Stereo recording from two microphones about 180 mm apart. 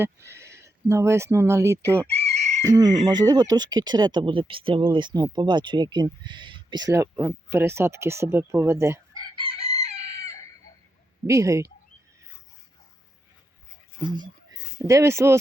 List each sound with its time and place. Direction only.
0.3 s speech: 15° right (ahead or behind)
2.0 s chicken: 35° right (ahead or behind)
2.6 s speech: 20° right (ahead or behind)
9.4 s chicken: 35° right (ahead or behind)
11.3 s speech: 20° right (ahead or behind)
14.5 s speech: 20° right (ahead or behind)